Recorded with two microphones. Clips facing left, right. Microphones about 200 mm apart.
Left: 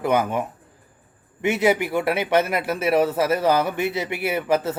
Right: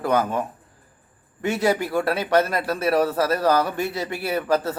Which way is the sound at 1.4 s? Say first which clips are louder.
Left 2 dB; 20° left (ahead or behind).